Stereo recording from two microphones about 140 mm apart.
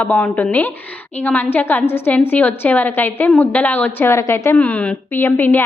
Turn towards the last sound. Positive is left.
turn(degrees=15)  # may be behind; listen again after turning